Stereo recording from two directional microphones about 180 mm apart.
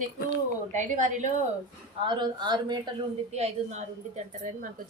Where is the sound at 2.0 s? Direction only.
25° right (ahead or behind).